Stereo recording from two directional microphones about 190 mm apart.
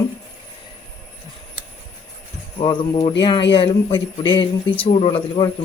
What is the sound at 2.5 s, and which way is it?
Speech, 25° left (ahead or behind).